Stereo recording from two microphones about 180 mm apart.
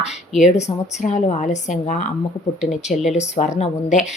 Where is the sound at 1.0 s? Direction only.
45° left (ahead or behind).